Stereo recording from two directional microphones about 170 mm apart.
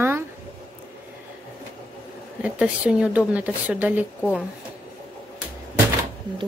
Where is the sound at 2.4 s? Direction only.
5° right (ahead or behind).